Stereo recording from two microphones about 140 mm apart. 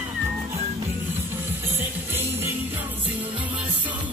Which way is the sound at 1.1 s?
15° right (ahead or behind).